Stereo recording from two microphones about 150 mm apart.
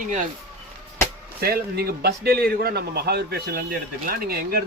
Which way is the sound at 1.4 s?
90° right.